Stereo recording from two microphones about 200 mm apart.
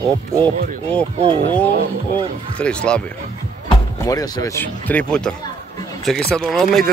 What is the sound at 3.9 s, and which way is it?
Speech, 15° left (ahead or behind).